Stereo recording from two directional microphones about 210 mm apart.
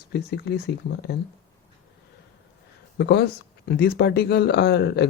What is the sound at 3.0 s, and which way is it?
Speech, 50° left (ahead or behind).